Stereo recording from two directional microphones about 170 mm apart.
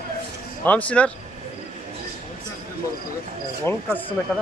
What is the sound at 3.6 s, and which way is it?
Speech, 10° left (ahead or behind).